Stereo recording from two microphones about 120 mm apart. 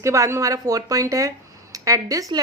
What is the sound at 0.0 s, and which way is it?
A woman's voice, 25° right (ahead or behind).